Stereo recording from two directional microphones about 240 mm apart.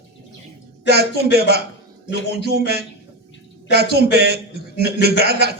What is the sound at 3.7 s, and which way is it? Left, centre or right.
A man's voice, right.